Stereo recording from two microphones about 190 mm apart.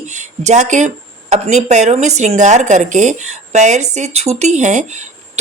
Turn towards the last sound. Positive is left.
turn(degrees=-40)  # may be behind; listen again after turning